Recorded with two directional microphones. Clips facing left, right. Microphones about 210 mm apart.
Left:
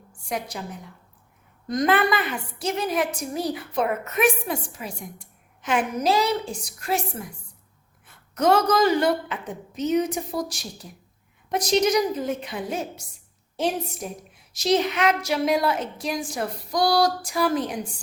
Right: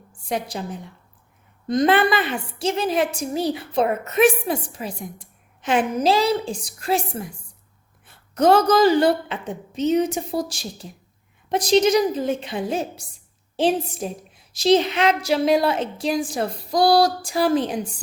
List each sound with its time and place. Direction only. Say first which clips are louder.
0.3 s a woman's voice: right 4 dB; 30° right (ahead or behind)
8.0 s a woman's voice: right 4 dB; 30° right (ahead or behind)